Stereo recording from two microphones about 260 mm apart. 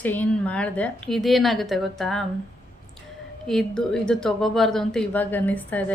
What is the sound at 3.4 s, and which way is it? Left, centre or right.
A woman's voice, centre.